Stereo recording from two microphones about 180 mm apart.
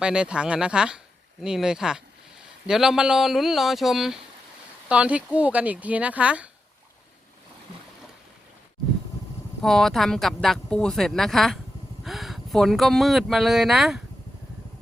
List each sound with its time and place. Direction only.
0.0 s speech: 5° right (ahead or behind)
9.6 s speech: centre (ahead or behind)